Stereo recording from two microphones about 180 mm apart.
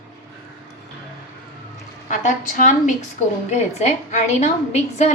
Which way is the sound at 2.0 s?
45° left (ahead or behind).